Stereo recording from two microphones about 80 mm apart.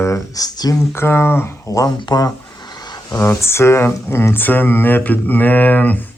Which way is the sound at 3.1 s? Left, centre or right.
Left.